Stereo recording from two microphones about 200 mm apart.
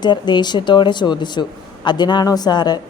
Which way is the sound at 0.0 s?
20° left (ahead or behind).